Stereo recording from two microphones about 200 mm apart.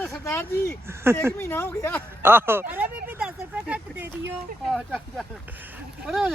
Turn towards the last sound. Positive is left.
turn(degrees=-5)  # may be behind; listen again after turning